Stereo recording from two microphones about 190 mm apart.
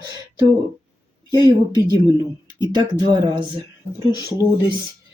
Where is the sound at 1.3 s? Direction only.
20° right (ahead or behind).